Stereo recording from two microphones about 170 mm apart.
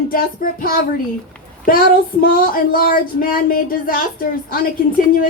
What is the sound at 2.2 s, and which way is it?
Speech, 55° left (ahead or behind).